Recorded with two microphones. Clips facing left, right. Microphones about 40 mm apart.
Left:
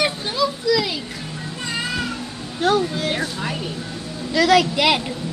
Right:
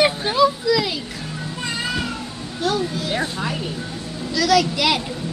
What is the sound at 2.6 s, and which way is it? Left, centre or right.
Speech, left.